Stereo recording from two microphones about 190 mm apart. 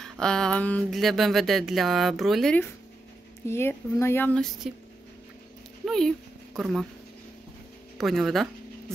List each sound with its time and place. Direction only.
0.0 s speech: 5° left (ahead or behind)
5.9 s a sound: centre (ahead or behind)
8.0 s speech: centre (ahead or behind)